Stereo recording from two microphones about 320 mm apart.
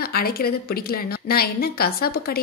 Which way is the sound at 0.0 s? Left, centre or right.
Left.